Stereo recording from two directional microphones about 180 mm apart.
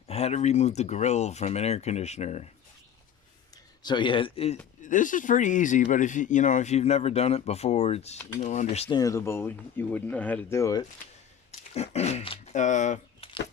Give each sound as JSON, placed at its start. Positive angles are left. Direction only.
{"t": 0.1, "sound": "speech", "side_deg": 35}
{"t": 3.8, "sound": "speech", "side_deg": 25}
{"t": 9.0, "sound": "speech", "side_deg": 15}
{"t": 11.7, "sound": "speech", "side_deg": 35}